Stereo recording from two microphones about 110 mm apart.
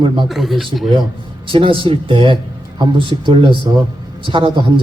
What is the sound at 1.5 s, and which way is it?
Speech, 50° right (ahead or behind).